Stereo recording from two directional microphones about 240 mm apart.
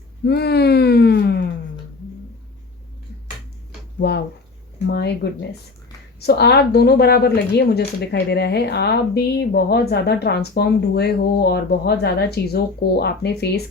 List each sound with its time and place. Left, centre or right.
0.3 s speech: left
4.9 s speech: left